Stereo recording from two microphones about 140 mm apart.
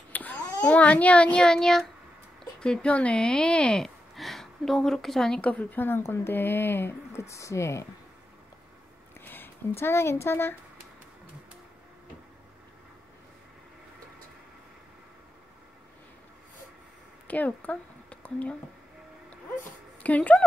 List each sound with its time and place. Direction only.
0.1 s a child's voice: 10° left (ahead or behind)
9.2 s speech: 15° left (ahead or behind)
17.3 s a woman's voice: 10° left (ahead or behind)
20.0 s speech: 10° left (ahead or behind)